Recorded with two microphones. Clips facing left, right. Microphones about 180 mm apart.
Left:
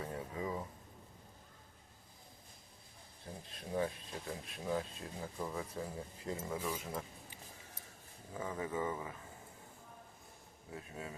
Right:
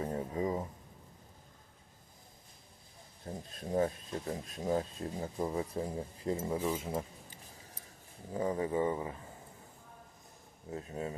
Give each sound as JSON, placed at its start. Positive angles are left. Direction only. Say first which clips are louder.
{"t": 0.0, "sound": "music", "louder": "right 7 dB", "side_deg": -40}
{"t": 3.3, "sound": "a sound", "louder": "right 6 dB", "side_deg": -40}
{"t": 3.7, "sound": "speech", "louder": "right 6 dB", "side_deg": -40}
{"t": 10.7, "sound": "speech", "louder": "right 8 dB", "side_deg": -40}